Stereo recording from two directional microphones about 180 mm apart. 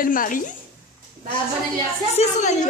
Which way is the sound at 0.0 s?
50° left (ahead or behind).